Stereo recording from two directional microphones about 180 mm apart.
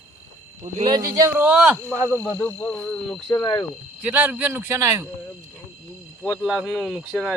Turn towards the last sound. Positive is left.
turn(degrees=-5)  # may be behind; listen again after turning